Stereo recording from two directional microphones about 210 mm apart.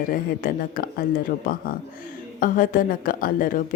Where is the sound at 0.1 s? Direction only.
45° left (ahead or behind).